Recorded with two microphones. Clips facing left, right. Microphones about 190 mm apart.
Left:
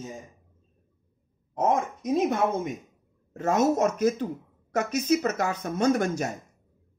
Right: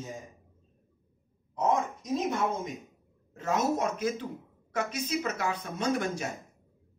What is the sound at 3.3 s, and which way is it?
A woman's voice, 45° left (ahead or behind).